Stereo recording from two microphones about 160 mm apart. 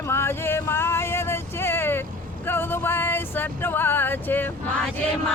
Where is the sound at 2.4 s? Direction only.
15° left (ahead or behind).